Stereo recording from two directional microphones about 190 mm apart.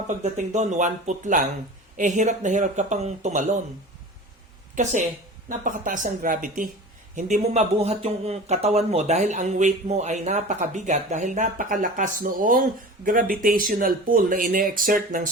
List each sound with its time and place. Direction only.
0.1 s speech: 40° right (ahead or behind)
4.7 s speech: 40° right (ahead or behind)